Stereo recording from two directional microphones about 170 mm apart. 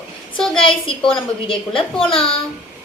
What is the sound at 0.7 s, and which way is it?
A woman's voice, 30° left (ahead or behind).